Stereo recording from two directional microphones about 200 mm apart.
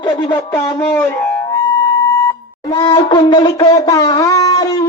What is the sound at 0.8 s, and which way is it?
Music, 10° left (ahead or behind).